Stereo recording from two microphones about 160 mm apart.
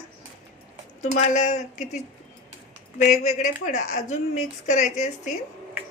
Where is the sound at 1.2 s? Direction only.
50° left (ahead or behind).